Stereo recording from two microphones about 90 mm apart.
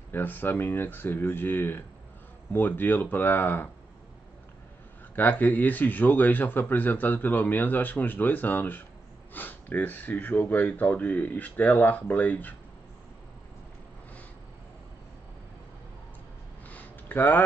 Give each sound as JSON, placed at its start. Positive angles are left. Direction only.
{"t": 0.1, "sound": "speech", "side_deg": 20}
{"t": 5.1, "sound": "speech", "side_deg": 20}
{"t": 16.6, "sound": "a sound", "side_deg": 20}